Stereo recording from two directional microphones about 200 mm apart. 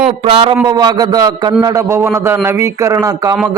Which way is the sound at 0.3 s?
30° right (ahead or behind).